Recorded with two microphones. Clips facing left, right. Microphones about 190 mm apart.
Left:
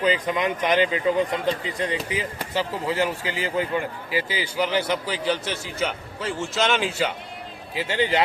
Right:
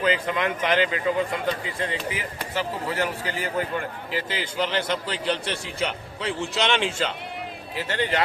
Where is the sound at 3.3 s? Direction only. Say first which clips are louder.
Left 2 dB; 10° left (ahead or behind).